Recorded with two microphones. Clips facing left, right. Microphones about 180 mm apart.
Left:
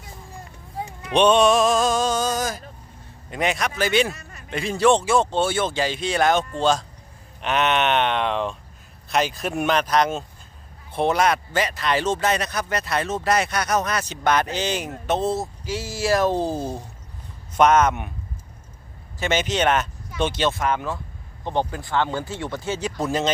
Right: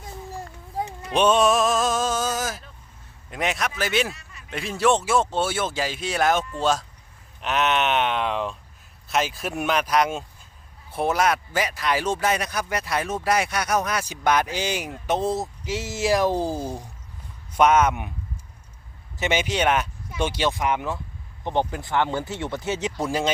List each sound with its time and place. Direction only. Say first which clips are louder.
1.1 s a man's voice: left 3 dB; 5° right (ahead or behind)
4.1 s a sound: left 4 dB; 45° left (ahead or behind)
4.4 s speech: left 3 dB; centre (ahead or behind)
19.2 s speech: left 1 dB; 10° right (ahead or behind)